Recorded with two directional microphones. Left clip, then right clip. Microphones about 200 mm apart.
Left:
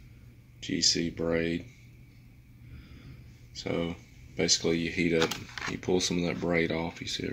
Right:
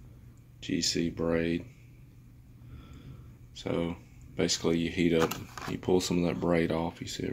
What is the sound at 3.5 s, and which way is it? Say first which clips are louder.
Speech: even; centre (ahead or behind).